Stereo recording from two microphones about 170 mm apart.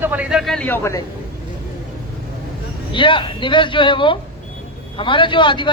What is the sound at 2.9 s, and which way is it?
A man's voice, 30° left (ahead or behind).